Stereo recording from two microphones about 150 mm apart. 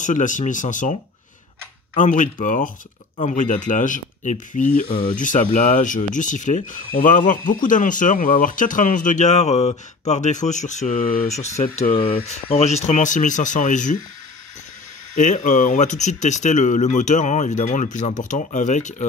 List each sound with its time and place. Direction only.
0.0 s speech: 60° left (ahead or behind)
2.0 s speech: 55° left (ahead or behind)
4.8 s speech: 35° left (ahead or behind)
5.2 s speech: 60° left (ahead or behind)
11.9 s speech: 40° left (ahead or behind); by 13.9 s 55° left (ahead or behind)
15.1 s speech: 55° left (ahead or behind)